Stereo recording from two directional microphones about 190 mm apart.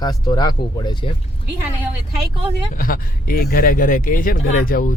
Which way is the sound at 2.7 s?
50° left (ahead or behind).